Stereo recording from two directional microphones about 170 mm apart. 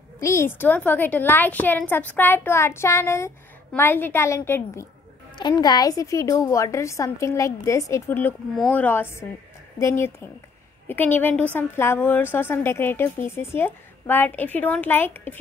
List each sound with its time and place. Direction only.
0.2 s a woman's voice: 15° left (ahead or behind)
5.3 s a woman's voice: 25° left (ahead or behind)